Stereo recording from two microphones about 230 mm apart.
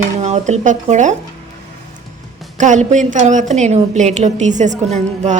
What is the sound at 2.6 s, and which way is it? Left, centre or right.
A woman's voice, right.